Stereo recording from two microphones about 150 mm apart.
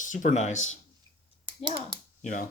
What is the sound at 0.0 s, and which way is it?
Speech, 60° left (ahead or behind).